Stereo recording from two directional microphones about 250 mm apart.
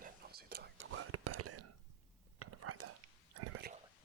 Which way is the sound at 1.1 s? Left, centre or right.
Right.